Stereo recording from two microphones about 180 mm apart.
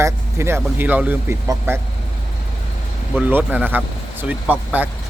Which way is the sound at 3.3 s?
10° right (ahead or behind).